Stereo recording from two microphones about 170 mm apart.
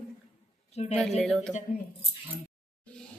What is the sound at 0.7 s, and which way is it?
Speech, 40° left (ahead or behind).